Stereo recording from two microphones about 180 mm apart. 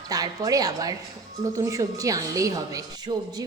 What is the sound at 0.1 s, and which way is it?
A woman's voice, 20° right (ahead or behind).